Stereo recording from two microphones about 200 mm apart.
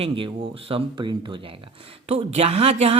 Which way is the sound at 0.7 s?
25° right (ahead or behind).